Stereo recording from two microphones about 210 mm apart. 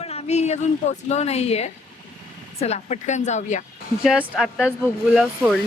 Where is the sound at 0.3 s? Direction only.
30° left (ahead or behind).